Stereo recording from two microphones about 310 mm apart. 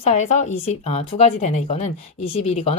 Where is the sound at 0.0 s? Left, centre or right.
Left.